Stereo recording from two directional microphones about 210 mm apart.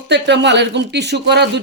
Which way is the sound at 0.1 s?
55° right (ahead or behind).